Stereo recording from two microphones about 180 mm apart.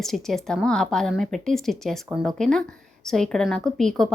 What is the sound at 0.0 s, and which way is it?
A woman's voice, centre (ahead or behind).